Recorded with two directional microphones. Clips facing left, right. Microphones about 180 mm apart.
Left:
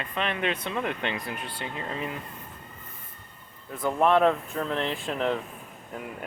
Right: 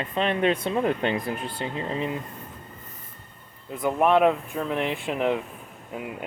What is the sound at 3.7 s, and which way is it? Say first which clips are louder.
Speech: right 2 dB; 15° right (ahead or behind).